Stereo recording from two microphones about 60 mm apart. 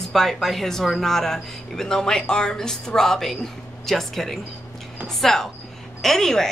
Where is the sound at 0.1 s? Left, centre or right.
Centre.